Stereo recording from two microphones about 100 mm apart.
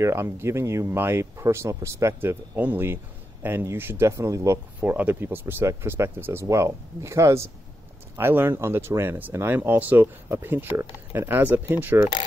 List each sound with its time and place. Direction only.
0.0 s speech: 25° right (ahead or behind)